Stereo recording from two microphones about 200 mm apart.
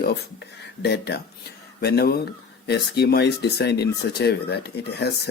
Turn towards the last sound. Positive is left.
turn(degrees=55)  # may be behind; listen again after turning